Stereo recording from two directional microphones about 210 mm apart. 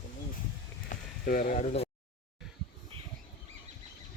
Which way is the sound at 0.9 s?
40° left (ahead or behind).